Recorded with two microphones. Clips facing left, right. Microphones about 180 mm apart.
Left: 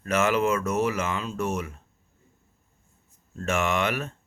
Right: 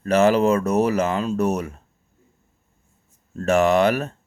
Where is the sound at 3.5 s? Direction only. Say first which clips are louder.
Right 9 dB; 40° right (ahead or behind).